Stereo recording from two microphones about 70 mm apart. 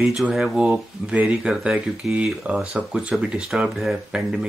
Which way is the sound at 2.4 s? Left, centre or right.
Centre.